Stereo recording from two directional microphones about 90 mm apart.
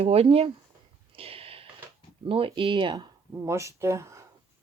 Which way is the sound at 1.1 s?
90° right.